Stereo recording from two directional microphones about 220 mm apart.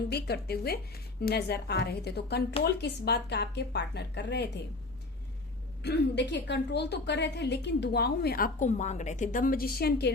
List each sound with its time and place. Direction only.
0.1 s a woman's voice: 45° left (ahead or behind)
5.8 s a woman's voice: 50° left (ahead or behind)